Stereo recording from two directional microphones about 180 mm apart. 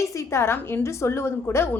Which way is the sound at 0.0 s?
15° left (ahead or behind).